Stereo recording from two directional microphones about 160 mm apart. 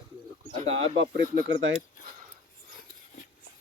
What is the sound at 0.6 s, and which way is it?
Speech, 40° right (ahead or behind).